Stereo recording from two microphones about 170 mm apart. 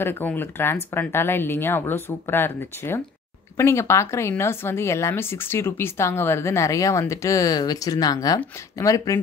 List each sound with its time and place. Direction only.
0.0 s speech: 10° left (ahead or behind)